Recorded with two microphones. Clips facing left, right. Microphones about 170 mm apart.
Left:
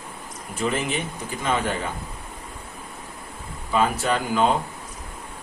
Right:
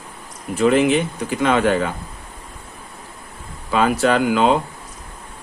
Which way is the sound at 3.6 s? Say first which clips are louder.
Right 5 dB; 80° right.